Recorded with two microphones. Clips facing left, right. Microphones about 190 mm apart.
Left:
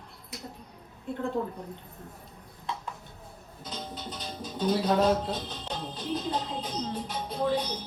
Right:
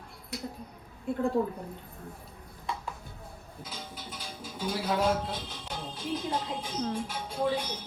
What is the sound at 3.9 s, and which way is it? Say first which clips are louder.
Speech: left 4 dB; 10° right (ahead or behind).